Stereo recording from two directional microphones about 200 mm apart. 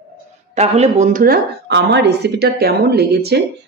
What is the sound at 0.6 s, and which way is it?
Speech, 35° right (ahead or behind).